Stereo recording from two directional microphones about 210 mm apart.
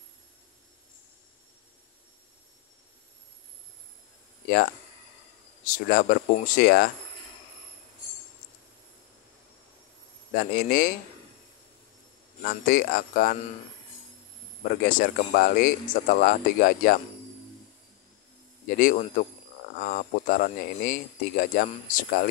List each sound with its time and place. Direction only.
5.9 s speech: 45° left (ahead or behind)
10.3 s speech: 45° left (ahead or behind)
12.4 s speech: 45° left (ahead or behind)
14.6 s speech: 40° left (ahead or behind)
18.8 s speech: 40° left (ahead or behind)